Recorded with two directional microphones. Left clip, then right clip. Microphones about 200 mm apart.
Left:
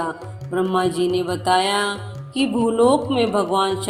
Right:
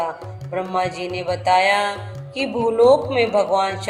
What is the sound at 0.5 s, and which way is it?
A woman's voice, 20° left (ahead or behind).